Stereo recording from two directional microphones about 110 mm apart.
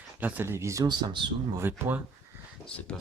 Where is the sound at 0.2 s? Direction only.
15° right (ahead or behind).